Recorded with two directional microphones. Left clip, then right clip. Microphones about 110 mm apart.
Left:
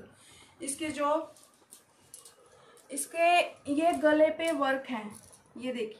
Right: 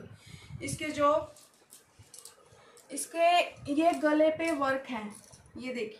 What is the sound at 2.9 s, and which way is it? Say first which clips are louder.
A woman's voice: even; 25° left (ahead or behind).